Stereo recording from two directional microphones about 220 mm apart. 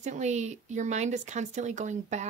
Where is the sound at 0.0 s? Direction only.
30° right (ahead or behind).